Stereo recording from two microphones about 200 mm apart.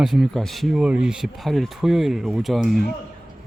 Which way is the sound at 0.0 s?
Centre (ahead or behind).